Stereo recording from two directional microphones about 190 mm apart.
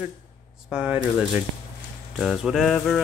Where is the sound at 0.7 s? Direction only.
5° right (ahead or behind).